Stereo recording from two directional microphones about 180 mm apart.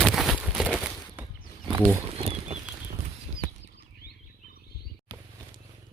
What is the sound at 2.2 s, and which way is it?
Bird flight, 35° right (ahead or behind).